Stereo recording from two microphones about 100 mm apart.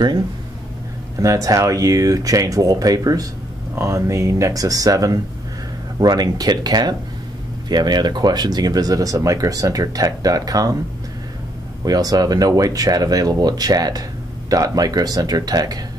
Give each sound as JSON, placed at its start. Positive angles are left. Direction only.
{"t": 1.2, "sound": "speech", "side_deg": -35}
{"t": 11.8, "sound": "speech", "side_deg": -40}